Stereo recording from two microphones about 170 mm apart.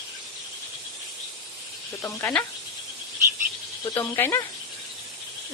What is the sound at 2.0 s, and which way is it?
Speech, 10° left (ahead or behind).